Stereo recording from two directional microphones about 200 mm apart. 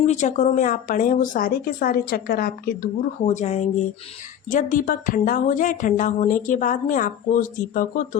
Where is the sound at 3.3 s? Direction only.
35° left (ahead or behind).